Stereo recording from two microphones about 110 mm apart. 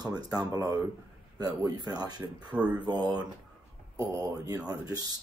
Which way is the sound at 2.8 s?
40° right (ahead or behind).